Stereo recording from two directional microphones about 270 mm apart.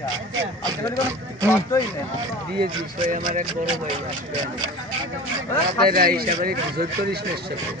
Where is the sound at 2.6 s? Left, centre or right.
Right.